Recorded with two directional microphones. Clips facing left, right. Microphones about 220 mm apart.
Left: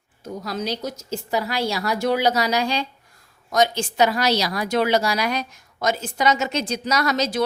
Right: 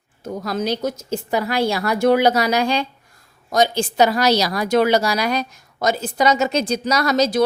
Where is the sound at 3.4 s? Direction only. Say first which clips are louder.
Right 2 dB; 35° right (ahead or behind).